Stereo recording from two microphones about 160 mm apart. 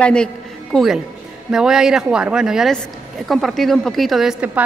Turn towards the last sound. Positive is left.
turn(degrees=-5)  # may be behind; listen again after turning